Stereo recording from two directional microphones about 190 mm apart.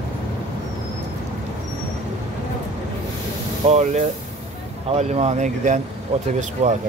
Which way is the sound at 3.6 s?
35° right (ahead or behind).